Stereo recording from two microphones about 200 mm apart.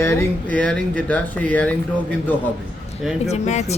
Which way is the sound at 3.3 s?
35° left (ahead or behind).